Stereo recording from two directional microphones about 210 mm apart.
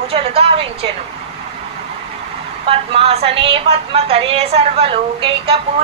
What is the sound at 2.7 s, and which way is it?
A woman's voice, 25° right (ahead or behind).